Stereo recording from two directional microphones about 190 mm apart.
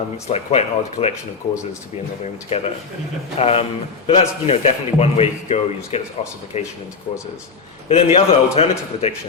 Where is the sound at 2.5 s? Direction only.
30° left (ahead or behind).